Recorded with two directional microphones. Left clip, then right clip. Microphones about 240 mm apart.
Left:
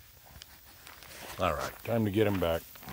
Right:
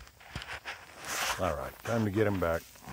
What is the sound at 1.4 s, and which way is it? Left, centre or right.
Speech, centre.